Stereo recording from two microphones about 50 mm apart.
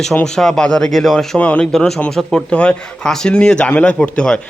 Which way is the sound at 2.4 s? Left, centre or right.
Left.